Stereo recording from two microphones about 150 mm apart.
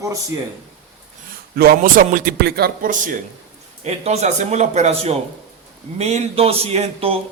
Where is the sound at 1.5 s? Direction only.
80° right; by 3.2 s 60° right (ahead or behind).